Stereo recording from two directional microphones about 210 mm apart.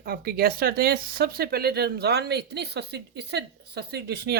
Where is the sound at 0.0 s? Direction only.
45° right (ahead or behind).